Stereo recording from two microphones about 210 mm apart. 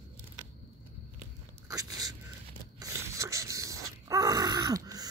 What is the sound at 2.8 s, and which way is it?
Groan, 15° right (ahead or behind).